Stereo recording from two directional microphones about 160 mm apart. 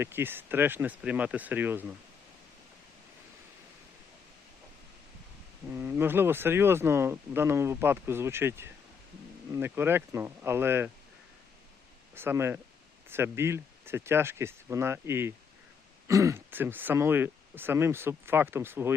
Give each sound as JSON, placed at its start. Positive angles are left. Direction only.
{"t": 0.0, "sound": "speech", "side_deg": -15}
{"t": 5.7, "sound": "speech", "side_deg": -15}
{"t": 12.1, "sound": "speech", "side_deg": -15}